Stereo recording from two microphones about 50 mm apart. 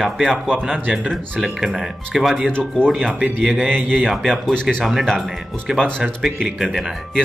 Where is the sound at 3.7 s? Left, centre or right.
Right.